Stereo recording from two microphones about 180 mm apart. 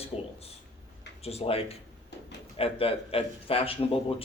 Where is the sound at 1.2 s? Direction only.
35° left (ahead or behind).